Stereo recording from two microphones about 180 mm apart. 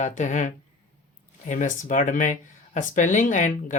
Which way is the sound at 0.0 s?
45° left (ahead or behind).